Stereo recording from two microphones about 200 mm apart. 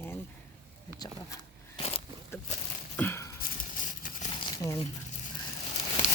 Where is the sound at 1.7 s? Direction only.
30° left (ahead or behind).